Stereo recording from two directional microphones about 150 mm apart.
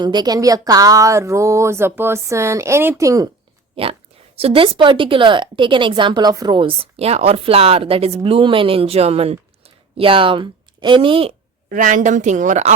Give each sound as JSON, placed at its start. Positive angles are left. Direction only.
{"t": 0.0, "sound": "speech", "side_deg": -30}
{"t": 3.8, "sound": "speech", "side_deg": -40}
{"t": 11.7, "sound": "a woman's voice", "side_deg": -65}